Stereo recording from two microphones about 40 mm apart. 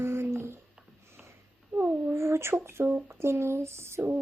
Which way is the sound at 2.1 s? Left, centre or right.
Right.